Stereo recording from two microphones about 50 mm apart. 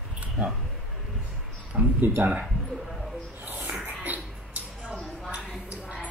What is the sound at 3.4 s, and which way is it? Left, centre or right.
Music, right.